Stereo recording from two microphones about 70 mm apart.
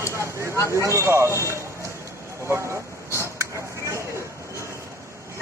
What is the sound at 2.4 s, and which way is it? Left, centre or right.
Vehicle, right.